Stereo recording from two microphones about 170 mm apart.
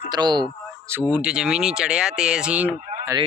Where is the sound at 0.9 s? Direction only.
10° right (ahead or behind).